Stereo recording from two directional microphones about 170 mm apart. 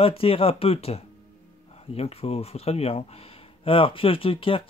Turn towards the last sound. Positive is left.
turn(degrees=30)  # may be behind; listen again after turning